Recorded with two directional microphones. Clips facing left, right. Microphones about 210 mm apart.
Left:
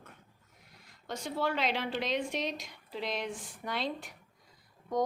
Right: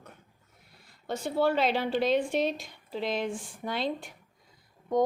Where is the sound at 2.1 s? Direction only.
5° right (ahead or behind).